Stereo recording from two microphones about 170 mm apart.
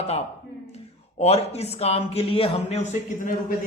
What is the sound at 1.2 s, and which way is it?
A man's voice, 40° left (ahead or behind).